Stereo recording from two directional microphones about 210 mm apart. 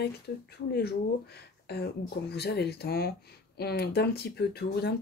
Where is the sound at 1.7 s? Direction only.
50° left (ahead or behind).